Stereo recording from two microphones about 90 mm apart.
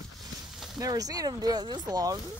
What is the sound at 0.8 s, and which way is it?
Speech, 45° right (ahead or behind).